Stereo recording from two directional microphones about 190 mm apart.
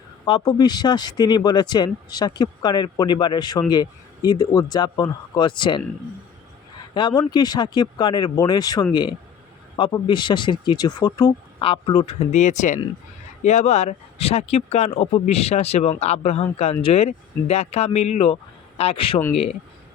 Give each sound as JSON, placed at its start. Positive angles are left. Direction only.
{"t": 0.3, "sound": "speech", "side_deg": 25}
{"t": 6.9, "sound": "speech", "side_deg": 25}